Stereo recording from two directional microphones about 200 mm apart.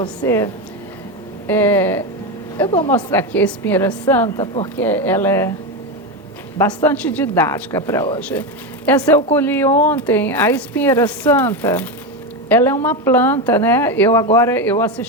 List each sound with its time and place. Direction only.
0.0 s speech: 15° left (ahead or behind)
2.6 s speech: 25° left (ahead or behind)
2.9 s speech: 10° left (ahead or behind)
6.8 s speech: 5° left (ahead or behind)